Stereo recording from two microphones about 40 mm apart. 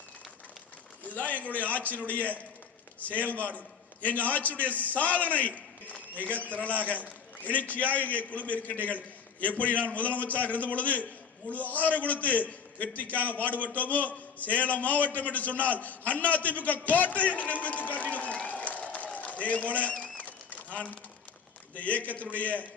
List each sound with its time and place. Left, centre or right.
1.0 s a man's voice: left
18.1 s applause: left
19.1 s a sound: left
21.7 s a man's voice: left